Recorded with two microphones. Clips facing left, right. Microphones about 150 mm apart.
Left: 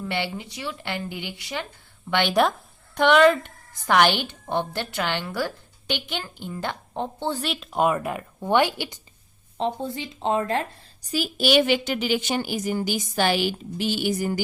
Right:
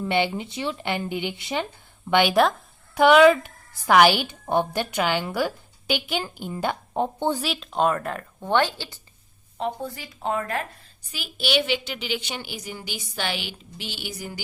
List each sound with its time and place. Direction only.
0.1 s a woman's voice: 20° right (ahead or behind)
2.3 s a woman's voice: centre (ahead or behind)
7.4 s speech: centre (ahead or behind)
9.6 s speech: 25° left (ahead or behind)
11.1 s a woman's voice: 40° left (ahead or behind)